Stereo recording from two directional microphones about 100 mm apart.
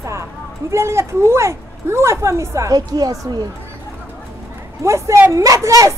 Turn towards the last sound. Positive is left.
turn(degrees=-30)  # may be behind; listen again after turning